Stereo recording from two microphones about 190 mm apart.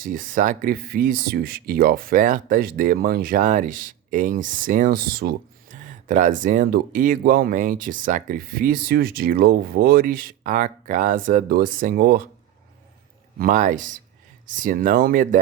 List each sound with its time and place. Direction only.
0.0 s speech: 45° right (ahead or behind)
6.1 s speech: 40° right (ahead or behind)
13.4 s speech: 40° right (ahead or behind)